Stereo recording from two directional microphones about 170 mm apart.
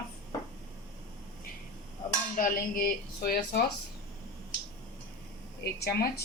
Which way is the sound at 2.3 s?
55° left (ahead or behind).